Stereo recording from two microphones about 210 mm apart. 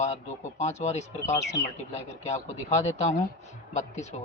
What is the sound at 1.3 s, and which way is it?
Speech, 15° left (ahead or behind).